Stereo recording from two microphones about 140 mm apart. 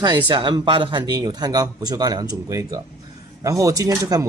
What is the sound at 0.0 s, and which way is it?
Speech, 35° right (ahead or behind).